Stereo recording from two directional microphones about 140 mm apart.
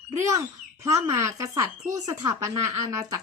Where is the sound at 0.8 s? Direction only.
20° right (ahead or behind).